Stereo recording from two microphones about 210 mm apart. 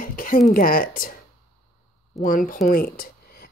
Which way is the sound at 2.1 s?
40° left (ahead or behind).